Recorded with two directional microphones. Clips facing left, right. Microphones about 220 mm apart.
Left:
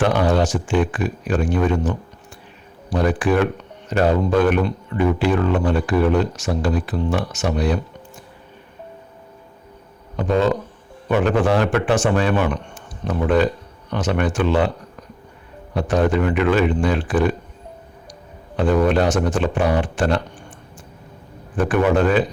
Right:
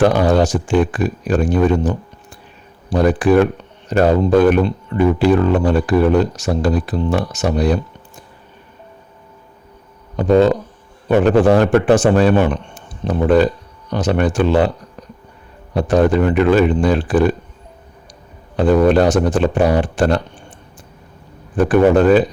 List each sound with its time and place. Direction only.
0.0 s speech: 40° right (ahead or behind)
10.2 s speech: 35° right (ahead or behind)
15.7 s speech: 35° right (ahead or behind)
18.5 s speech: 35° right (ahead or behind)
21.5 s speech: 35° right (ahead or behind)